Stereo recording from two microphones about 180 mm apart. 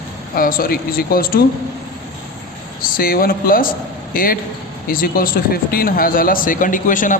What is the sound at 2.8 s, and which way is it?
Speech, 55° left (ahead or behind).